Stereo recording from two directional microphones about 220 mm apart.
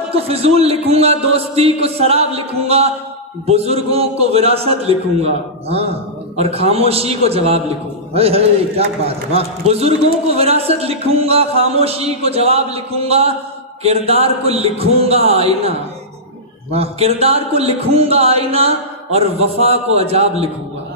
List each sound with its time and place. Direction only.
0.1 s speech: 25° right (ahead or behind)
16.7 s speech: 25° right (ahead or behind)